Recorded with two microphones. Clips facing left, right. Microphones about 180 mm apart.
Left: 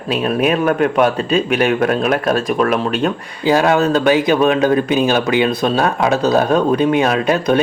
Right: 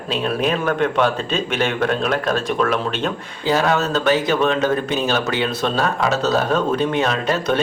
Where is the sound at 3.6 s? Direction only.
15° left (ahead or behind).